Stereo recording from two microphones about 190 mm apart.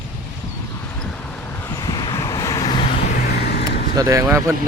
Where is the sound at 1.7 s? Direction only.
20° left (ahead or behind).